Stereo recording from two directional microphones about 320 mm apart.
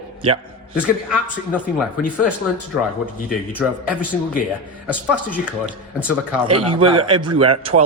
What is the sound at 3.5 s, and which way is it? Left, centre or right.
Speech, centre.